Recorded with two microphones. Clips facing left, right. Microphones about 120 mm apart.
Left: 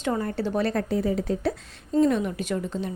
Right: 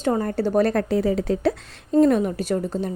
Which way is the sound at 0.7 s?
75° right (ahead or behind).